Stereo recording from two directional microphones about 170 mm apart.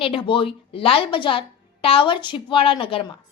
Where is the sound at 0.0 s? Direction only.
30° left (ahead or behind).